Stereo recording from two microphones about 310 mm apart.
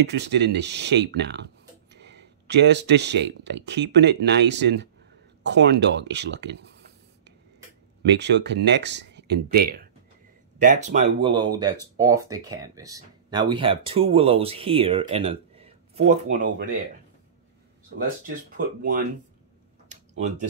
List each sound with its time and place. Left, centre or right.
0.0 s speech: right
8.0 s speech: right
18.2 s speech: right
19.9 s tick-tock: right